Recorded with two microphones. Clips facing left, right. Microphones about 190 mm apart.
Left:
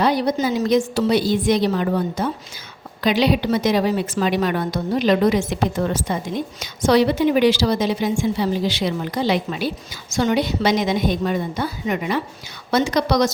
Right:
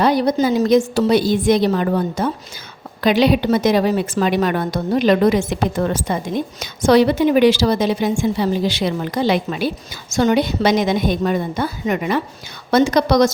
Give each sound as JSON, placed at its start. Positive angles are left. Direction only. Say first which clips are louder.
{"t": 0.0, "sound": "a woman's voice", "louder": "right 3 dB", "side_deg": -45}